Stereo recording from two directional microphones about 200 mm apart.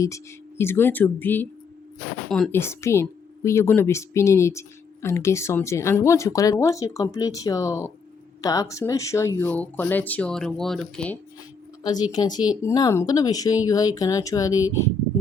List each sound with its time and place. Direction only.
0.0 s speech: 15° left (ahead or behind)
11.8 s a woman's voice: 20° left (ahead or behind)